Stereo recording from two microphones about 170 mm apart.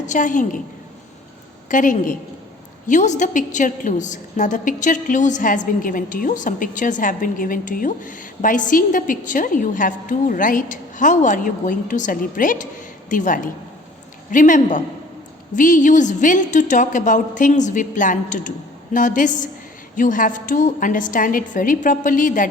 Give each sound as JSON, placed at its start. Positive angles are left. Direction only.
{"t": 0.1, "sound": "a woman's voice", "side_deg": 50}
{"t": 1.7, "sound": "a woman's voice", "side_deg": 50}